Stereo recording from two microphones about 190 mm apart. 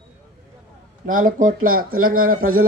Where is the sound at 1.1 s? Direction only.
45° right (ahead or behind).